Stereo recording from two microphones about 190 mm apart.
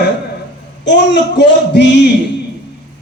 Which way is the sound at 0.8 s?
65° left (ahead or behind).